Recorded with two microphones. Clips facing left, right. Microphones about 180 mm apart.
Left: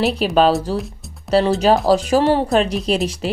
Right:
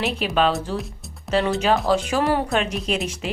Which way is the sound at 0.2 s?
35° left (ahead or behind).